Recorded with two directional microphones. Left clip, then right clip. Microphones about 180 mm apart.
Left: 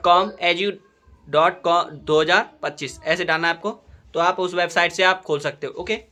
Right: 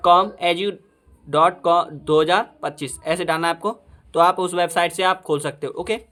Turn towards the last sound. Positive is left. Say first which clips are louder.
# right 1 dB
turn(degrees=-35)  # may be behind; listen again after turning